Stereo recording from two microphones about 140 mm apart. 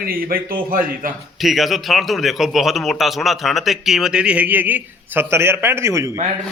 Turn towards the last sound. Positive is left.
turn(degrees=-20)  # may be behind; listen again after turning